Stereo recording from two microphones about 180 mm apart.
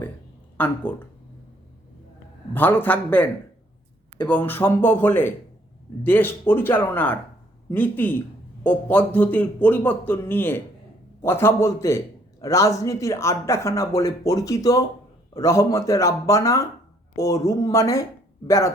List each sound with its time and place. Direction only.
0.5 s a man's voice: 10° left (ahead or behind)
2.5 s a man's voice: 10° left (ahead or behind)
4.3 s a man's voice: 10° left (ahead or behind)